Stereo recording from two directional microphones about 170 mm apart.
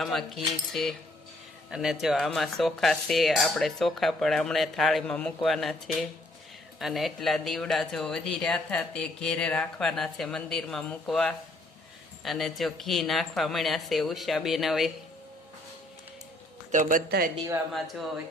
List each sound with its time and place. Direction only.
0.0 s speech: centre (ahead or behind)
16.7 s speech: 50° right (ahead or behind)
17.1 s speech: 60° right (ahead or behind)
17.3 s speech: 20° right (ahead or behind)
17.7 s speech: centre (ahead or behind)